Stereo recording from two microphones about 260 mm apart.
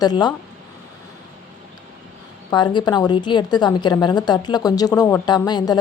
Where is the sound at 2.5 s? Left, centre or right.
Centre.